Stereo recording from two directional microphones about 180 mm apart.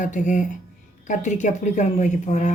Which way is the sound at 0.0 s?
45° left (ahead or behind).